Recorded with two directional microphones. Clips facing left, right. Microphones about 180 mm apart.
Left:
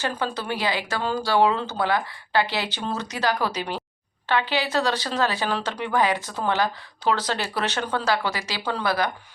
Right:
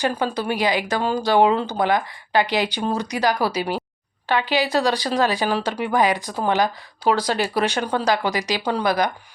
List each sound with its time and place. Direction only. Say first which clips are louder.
0.0 s speech: right 5 dB; 15° right (ahead or behind)